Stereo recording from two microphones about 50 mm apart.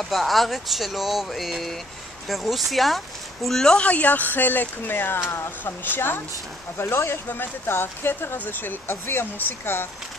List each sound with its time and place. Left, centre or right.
0.0 s a woman's voice: centre
3.8 s speech: left
5.3 s speech: left
5.9 s speech: left
6.8 s speech: left
7.2 s speech: left